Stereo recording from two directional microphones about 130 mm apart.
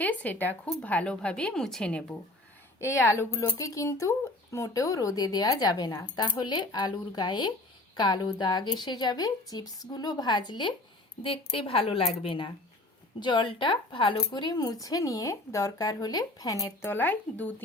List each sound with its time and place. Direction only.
0.0 s a woman's voice: 10° left (ahead or behind)
2.8 s a woman's voice: 20° left (ahead or behind)
16.9 s a woman's voice: 15° left (ahead or behind)